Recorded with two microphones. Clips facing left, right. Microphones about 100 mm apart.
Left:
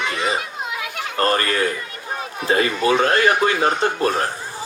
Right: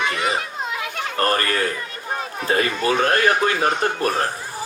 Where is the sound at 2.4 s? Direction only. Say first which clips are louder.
Left 2 dB; 25° left (ahead or behind).